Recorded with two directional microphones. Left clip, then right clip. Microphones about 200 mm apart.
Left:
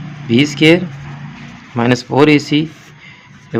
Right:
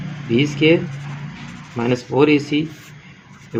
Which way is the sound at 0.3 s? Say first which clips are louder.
Left 5 dB; 50° left (ahead or behind).